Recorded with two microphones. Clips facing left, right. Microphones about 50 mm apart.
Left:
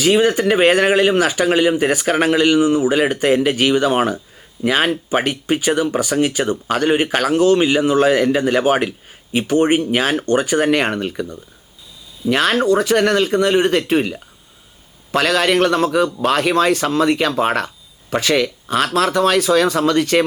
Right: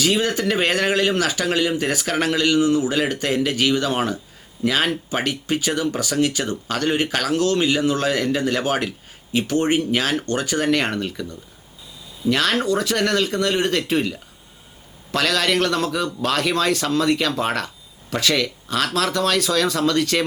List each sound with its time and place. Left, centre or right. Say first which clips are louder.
0.0 s speech: left 6 dB; left